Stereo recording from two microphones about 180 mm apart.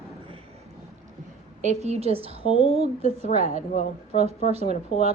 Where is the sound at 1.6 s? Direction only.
40° right (ahead or behind).